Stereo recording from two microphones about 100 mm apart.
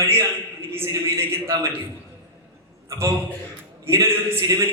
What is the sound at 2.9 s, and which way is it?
A man's voice, 30° right (ahead or behind).